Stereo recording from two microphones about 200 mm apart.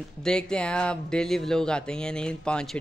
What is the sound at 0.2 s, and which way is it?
Speech, 5° left (ahead or behind).